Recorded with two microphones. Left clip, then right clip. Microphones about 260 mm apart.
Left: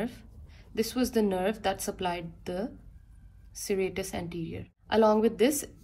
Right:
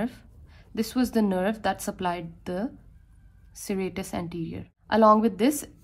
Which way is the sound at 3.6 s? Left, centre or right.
Centre.